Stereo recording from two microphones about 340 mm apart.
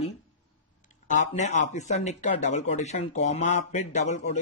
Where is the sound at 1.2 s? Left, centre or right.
Left.